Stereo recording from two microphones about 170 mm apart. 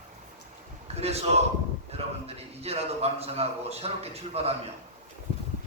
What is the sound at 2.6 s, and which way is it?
Speech, 35° right (ahead or behind).